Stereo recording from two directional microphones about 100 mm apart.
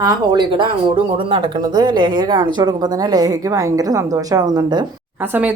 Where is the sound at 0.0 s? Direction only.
50° right (ahead or behind).